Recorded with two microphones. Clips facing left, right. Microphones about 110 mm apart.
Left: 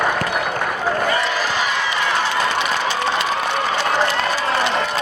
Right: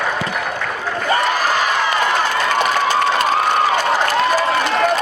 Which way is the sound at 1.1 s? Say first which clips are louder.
Right 3 dB; 50° right (ahead or behind).